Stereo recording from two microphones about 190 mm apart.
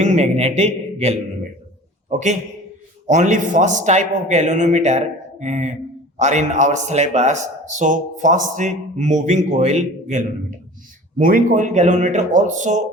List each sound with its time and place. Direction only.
0.0 s a man's voice: 40° right (ahead or behind)